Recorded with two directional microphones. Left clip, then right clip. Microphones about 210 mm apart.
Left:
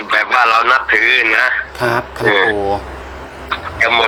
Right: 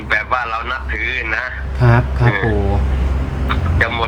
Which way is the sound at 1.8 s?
50° left (ahead or behind).